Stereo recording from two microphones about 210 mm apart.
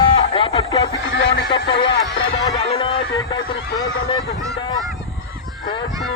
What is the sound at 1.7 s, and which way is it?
Speech, 25° left (ahead or behind).